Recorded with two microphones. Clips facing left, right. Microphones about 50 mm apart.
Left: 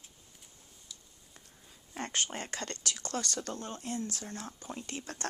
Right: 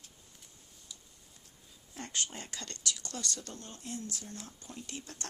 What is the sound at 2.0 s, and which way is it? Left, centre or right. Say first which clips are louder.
Speech: left 4 dB; left.